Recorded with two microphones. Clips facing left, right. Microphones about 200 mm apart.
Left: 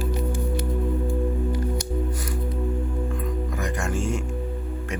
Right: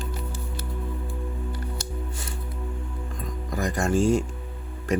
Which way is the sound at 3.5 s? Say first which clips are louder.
Right 9 dB; 35° right (ahead or behind).